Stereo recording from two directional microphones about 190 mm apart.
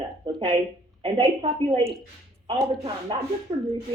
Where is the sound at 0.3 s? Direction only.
25° right (ahead or behind).